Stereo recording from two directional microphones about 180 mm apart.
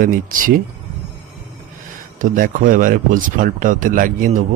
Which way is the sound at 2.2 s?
50° right (ahead or behind).